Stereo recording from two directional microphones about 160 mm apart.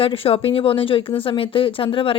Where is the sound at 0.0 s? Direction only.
35° left (ahead or behind).